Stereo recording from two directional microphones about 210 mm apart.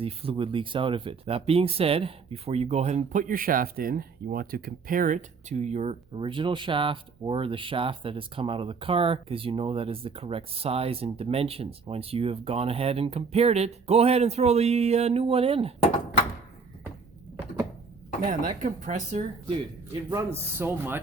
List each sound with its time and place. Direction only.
0.0 s speech: 25° right (ahead or behind)
18.6 s speech: 35° right (ahead or behind)
19.9 s speech: 15° right (ahead or behind)